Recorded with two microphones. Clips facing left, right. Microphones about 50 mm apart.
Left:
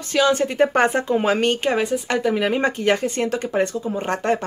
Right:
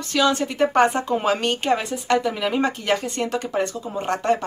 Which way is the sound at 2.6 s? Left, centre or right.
Left.